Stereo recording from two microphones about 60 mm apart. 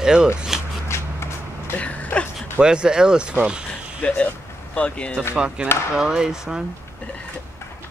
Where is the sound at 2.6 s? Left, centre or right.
Centre.